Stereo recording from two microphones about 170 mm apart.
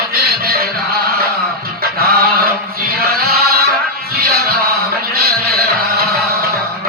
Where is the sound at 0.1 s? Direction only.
65° right (ahead or behind).